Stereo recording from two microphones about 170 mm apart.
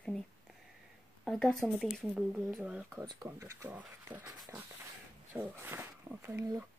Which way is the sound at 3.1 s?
20° right (ahead or behind).